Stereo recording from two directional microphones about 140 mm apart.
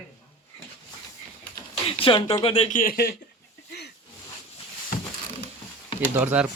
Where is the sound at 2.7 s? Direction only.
90° left.